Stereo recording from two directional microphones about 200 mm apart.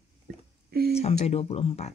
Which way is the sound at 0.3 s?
55° right (ahead or behind).